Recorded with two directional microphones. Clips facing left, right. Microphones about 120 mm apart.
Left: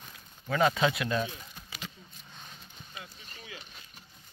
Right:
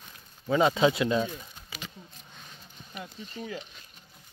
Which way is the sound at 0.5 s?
25° right (ahead or behind).